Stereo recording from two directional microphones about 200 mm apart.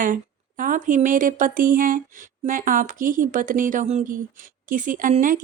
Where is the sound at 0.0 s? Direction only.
40° right (ahead or behind).